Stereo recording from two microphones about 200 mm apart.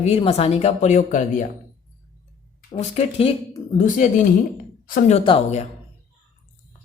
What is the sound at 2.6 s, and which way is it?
Speech, 35° left (ahead or behind).